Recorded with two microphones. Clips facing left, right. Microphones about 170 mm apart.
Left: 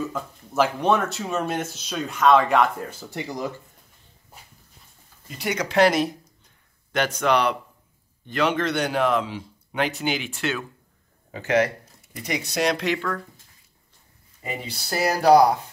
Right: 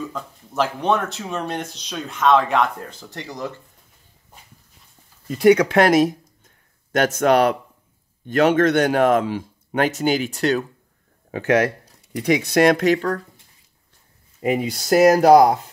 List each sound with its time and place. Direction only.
0.1 s speech: centre (ahead or behind)
5.4 s speech: 55° right (ahead or behind); by 10.6 s 40° right (ahead or behind)
12.2 s speech: 60° right (ahead or behind); by 13.2 s 40° right (ahead or behind)
14.4 s speech: 90° right
15.0 s speech: 45° right (ahead or behind)